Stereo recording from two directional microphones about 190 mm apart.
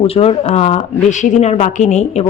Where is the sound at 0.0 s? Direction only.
35° left (ahead or behind).